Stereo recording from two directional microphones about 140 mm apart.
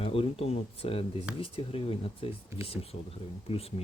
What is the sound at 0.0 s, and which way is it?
Speech, 45° left (ahead or behind).